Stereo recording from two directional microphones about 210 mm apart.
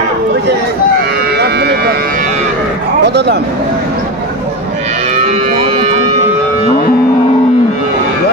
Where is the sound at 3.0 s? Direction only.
55° right (ahead or behind).